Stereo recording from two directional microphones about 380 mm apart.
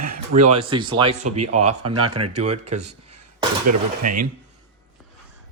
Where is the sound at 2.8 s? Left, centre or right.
Right.